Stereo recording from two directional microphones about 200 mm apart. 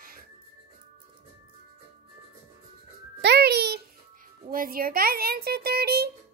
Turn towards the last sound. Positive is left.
turn(degrees=-50)  # may be behind; listen again after turning